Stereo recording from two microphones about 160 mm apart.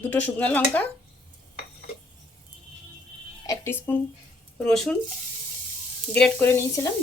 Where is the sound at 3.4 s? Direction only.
15° left (ahead or behind).